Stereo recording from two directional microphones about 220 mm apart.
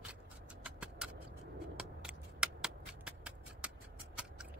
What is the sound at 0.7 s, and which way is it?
Vehicle, 5° right (ahead or behind).